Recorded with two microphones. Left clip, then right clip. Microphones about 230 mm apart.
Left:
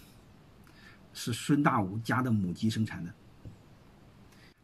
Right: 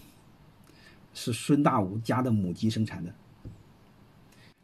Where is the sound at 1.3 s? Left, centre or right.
Centre.